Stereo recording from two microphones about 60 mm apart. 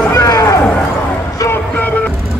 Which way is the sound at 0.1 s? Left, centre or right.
Left.